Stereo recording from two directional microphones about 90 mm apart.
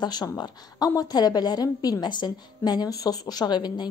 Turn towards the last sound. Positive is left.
turn(degrees=55)  # may be behind; listen again after turning